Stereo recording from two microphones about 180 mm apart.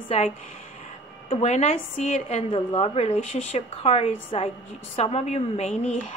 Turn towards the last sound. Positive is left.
turn(degrees=40)  # may be behind; listen again after turning